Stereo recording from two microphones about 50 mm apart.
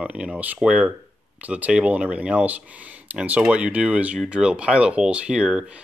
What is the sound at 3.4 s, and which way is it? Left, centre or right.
Speech, centre.